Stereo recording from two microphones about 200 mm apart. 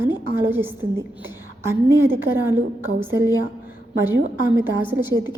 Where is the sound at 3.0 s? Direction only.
10° right (ahead or behind).